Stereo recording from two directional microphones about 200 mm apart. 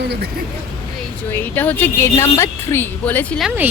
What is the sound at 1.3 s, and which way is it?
Speech, 10° left (ahead or behind).